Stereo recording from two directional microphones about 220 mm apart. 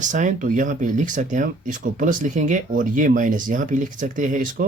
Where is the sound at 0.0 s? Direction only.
35° right (ahead or behind).